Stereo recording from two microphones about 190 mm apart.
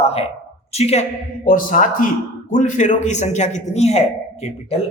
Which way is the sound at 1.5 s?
45° left (ahead or behind).